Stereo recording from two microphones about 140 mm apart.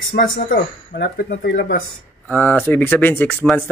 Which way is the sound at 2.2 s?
10° left (ahead or behind).